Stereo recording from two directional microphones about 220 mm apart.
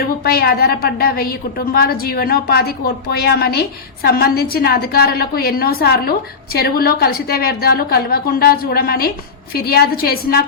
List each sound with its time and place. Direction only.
0.3 s a woman's voice: 45° left (ahead or behind)